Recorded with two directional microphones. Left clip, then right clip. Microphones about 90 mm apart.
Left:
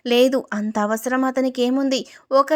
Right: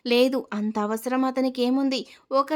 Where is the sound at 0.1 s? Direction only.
35° left (ahead or behind).